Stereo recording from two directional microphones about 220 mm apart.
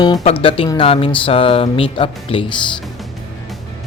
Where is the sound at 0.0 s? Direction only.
20° left (ahead or behind).